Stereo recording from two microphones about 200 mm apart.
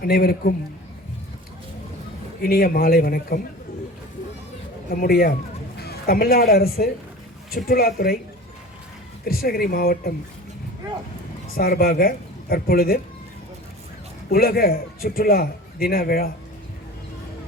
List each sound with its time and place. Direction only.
0.0 s a man's voice: 50° left (ahead or behind)
2.4 s a man's voice: 50° left (ahead or behind)
4.9 s a man's voice: 50° left (ahead or behind)
9.2 s a man's voice: 50° left (ahead or behind)
11.4 s speech: 45° left (ahead or behind)
14.3 s a man's voice: 50° left (ahead or behind)